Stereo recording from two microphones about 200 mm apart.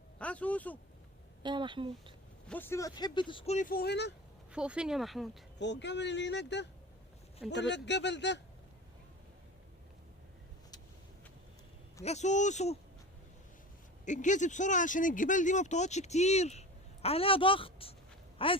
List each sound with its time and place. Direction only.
0.2 s speech: 5° left (ahead or behind)
1.4 s speech: 25° right (ahead or behind)
2.5 s speech: 10° left (ahead or behind); by 3.7 s 35° left (ahead or behind)
3.7 s speech: 55° left (ahead or behind)
4.5 s speech: 5° right (ahead or behind)
5.8 s speech: 60° left (ahead or behind)
12.0 s speech: 35° left (ahead or behind)
14.0 s speech: 40° left (ahead or behind)